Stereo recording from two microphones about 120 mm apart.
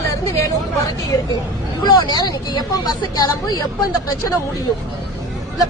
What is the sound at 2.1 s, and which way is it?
A woman's voice, 35° left (ahead or behind).